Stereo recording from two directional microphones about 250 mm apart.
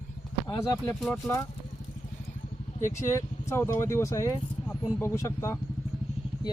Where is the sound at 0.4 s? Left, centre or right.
Centre.